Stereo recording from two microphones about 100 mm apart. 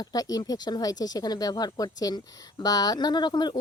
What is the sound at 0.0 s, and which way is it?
Speech, 40° left (ahead or behind).